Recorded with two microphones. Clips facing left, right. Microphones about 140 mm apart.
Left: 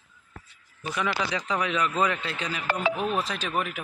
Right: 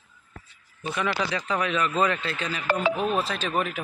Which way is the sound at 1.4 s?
15° left (ahead or behind).